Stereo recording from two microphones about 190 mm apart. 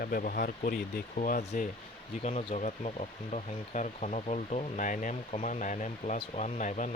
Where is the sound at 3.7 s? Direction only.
40° left (ahead or behind).